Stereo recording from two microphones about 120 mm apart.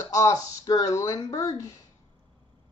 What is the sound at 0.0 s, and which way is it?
Speech, 30° left (ahead or behind).